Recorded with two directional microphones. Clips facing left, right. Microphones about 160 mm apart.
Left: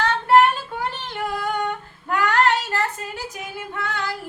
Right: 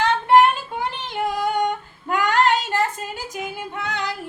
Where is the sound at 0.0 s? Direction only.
10° right (ahead or behind).